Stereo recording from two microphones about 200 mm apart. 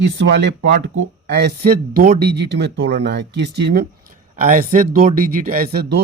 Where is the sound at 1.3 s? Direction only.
55° right (ahead or behind).